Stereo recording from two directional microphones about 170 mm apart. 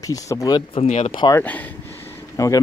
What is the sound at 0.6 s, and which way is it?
Speech, 35° left (ahead or behind).